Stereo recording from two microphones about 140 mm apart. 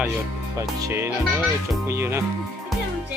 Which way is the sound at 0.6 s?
20° right (ahead or behind).